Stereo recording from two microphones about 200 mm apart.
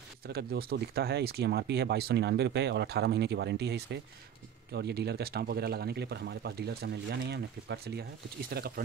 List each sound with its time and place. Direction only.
0.3 s speech: 55° right (ahead or behind)